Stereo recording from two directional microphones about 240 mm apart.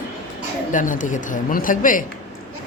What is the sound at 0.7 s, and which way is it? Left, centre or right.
Speech, left.